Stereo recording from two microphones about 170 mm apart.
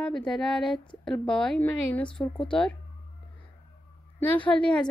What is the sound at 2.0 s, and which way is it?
Speech, 30° left (ahead or behind).